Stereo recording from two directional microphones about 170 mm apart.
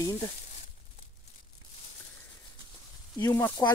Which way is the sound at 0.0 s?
20° left (ahead or behind).